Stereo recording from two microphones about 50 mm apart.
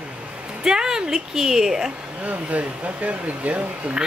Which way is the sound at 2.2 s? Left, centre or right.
Right.